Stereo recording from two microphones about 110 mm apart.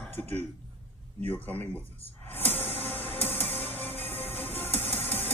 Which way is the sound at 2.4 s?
65° left (ahead or behind).